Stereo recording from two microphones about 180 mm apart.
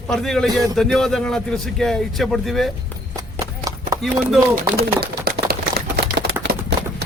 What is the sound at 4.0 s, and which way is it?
Speech, centre (ahead or behind).